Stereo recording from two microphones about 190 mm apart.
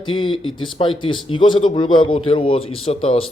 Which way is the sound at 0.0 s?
25° left (ahead or behind).